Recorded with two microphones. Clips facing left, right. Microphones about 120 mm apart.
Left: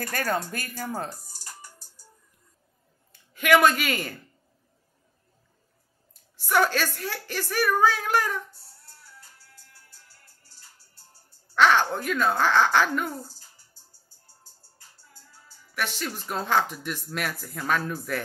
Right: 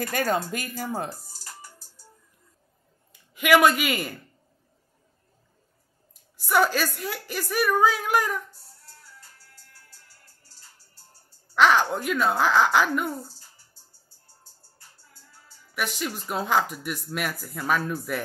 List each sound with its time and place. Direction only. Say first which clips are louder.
0.0 s a woman's voice: right 3 dB; 20° right (ahead or behind)
1.0 s music: right 2 dB; centre (ahead or behind)
3.1 s speech: right 1 dB; 10° right (ahead or behind)
6.3 s a woman's voice: right 1 dB; 5° right (ahead or behind)
11.5 s a woman's voice: right 1 dB; 10° right (ahead or behind)
15.7 s speech: right 1 dB; 5° right (ahead or behind)